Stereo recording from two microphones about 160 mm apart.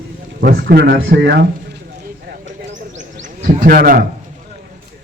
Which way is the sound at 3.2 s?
50° right (ahead or behind).